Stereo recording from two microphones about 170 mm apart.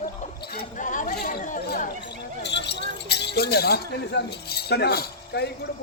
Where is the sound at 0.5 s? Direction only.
50° left (ahead or behind).